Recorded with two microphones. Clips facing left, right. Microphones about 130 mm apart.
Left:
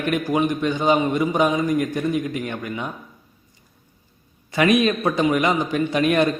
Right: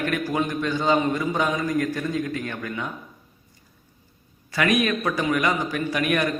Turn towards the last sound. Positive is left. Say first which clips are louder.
# left 5 dB
turn(degrees=25)  # may be behind; listen again after turning